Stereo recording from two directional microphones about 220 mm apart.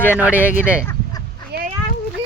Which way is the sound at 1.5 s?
45° right (ahead or behind).